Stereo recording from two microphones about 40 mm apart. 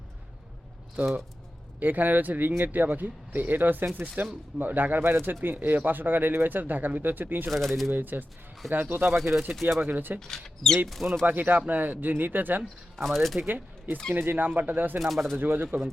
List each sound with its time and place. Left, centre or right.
1.8 s speech: right
3.9 s speech: right
7.5 s speech: centre
8.0 s speech: right
9.1 s speech: centre
9.8 s speech: right
10.2 s speech: centre
11.3 s speech: right
13.0 s speech: centre
14.1 s speech: right
14.9 s speech: centre
15.4 s speech: right